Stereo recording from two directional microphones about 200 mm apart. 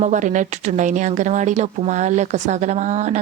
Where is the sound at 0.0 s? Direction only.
40° right (ahead or behind).